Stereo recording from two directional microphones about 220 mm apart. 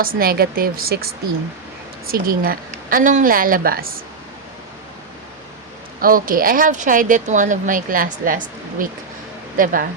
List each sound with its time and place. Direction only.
0.0 s speech: 40° right (ahead or behind)
6.0 s speech: 40° right (ahead or behind)